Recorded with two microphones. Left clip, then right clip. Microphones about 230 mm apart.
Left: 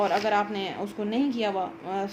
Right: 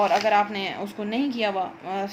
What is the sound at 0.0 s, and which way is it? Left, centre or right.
Speech, right.